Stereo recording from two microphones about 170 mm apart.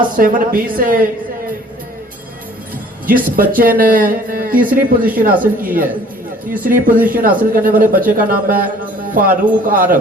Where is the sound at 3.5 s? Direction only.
55° right (ahead or behind).